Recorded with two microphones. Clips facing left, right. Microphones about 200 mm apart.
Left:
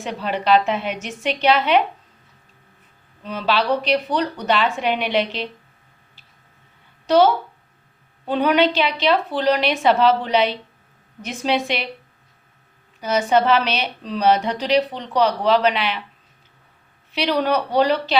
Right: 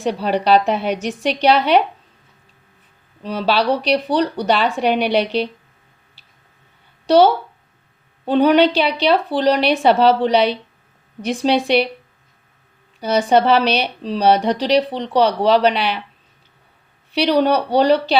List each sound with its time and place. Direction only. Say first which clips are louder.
0.0 s a woman's voice: right 6 dB; 35° right (ahead or behind)
3.2 s a woman's voice: right 3 dB; 35° right (ahead or behind)
8.2 s a woman's voice: right 5 dB; 35° right (ahead or behind)
13.0 s a woman's voice: right 3 dB; 35° right (ahead or behind)
17.2 s a woman's voice: right 5 dB; 35° right (ahead or behind)